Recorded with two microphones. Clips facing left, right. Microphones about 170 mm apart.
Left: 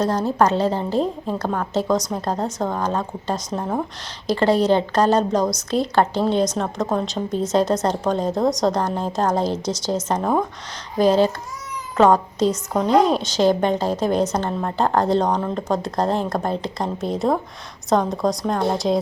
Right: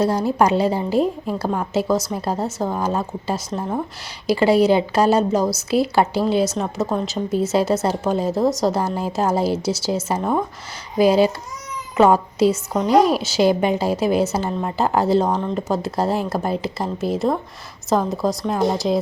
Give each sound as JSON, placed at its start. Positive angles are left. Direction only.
{"t": 0.0, "sound": "a woman's voice", "side_deg": -10}